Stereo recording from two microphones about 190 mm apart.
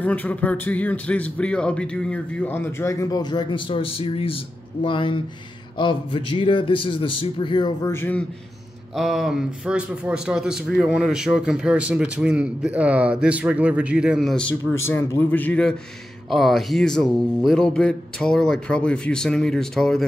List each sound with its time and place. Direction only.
0.0 s a man's voice: 10° left (ahead or behind)
14.9 s a man's voice: 15° left (ahead or behind)